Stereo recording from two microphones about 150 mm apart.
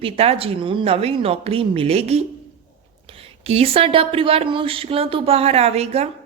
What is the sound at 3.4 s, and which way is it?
Speech, 40° right (ahead or behind).